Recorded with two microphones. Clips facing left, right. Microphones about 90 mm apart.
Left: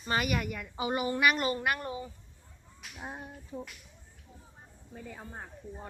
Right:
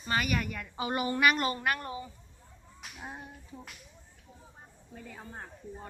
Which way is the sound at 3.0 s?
10° left (ahead or behind).